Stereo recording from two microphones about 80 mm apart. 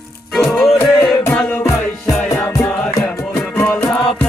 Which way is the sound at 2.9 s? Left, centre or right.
Left.